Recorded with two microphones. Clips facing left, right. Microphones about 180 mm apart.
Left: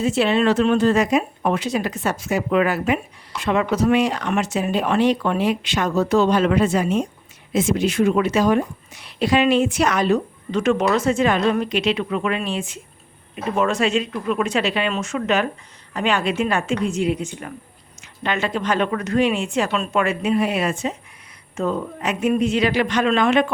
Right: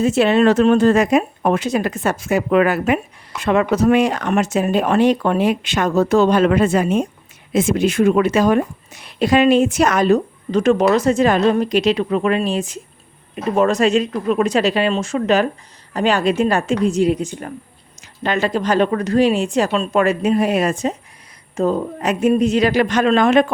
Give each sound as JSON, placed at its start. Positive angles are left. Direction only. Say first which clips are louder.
{"t": 0.0, "sound": "a woman's voice", "louder": "right 4 dB", "side_deg": -45}